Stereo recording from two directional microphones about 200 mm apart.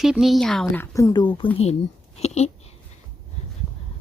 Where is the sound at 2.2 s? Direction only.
35° left (ahead or behind).